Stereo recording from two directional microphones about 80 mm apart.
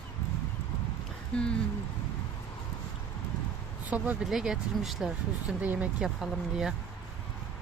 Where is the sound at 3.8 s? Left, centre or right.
Centre.